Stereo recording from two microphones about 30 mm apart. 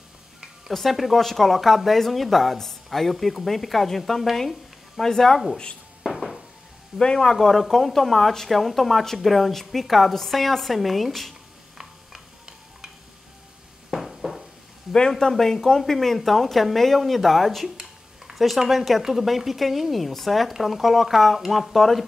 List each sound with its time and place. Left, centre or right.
0.8 s speech: centre
4.4 s a sound: centre
5.0 s speech: centre
6.0 s a sound: centre
7.0 s speech: left
7.2 s speech: centre
11.8 s stir: centre
13.8 s a sound: centre
15.0 s speech: centre